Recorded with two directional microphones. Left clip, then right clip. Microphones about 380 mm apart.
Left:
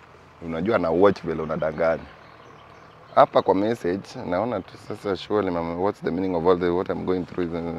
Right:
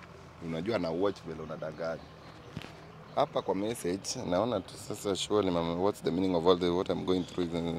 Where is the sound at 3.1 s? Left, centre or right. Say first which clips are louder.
Left 13 dB; left.